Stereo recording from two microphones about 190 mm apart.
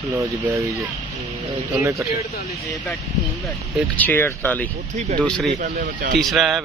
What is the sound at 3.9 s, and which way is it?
Speech, 10° left (ahead or behind).